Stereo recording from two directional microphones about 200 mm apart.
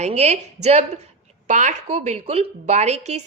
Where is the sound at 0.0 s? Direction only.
30° right (ahead or behind).